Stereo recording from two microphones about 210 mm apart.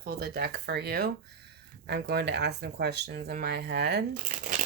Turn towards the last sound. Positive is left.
turn(degrees=-40)  # may be behind; listen again after turning